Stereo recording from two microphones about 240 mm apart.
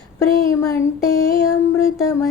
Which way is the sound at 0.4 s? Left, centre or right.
Centre.